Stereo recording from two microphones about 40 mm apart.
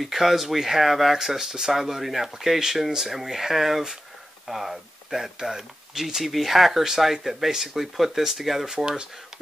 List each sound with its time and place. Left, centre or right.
0.0 s speech: centre
8.7 s speech: centre